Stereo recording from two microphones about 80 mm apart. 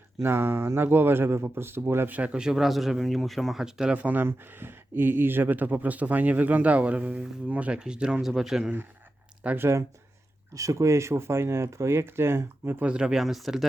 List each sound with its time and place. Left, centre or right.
0.2 s speech: right
2.1 s speech: centre
3.9 s speech: right; by 8.7 s centre
9.6 s speech: right
12.8 s speech: centre